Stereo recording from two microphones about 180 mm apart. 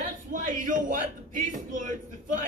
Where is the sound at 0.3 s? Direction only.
45° right (ahead or behind).